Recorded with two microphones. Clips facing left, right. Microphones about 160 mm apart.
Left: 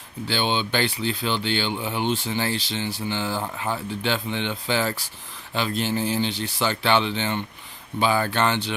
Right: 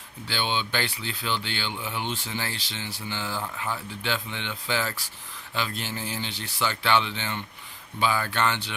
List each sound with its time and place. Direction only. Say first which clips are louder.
0.3 s speech: left 4 dB; 25° left (ahead or behind)